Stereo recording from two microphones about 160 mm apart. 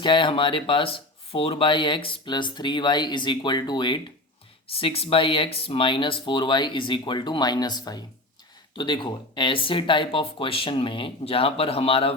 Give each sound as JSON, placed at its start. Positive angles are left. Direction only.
{"t": 0.0, "sound": "speech", "side_deg": 30}